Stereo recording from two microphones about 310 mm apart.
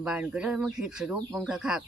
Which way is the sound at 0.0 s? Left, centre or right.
Centre.